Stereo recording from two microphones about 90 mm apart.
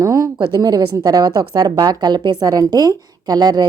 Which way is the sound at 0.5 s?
45° right (ahead or behind).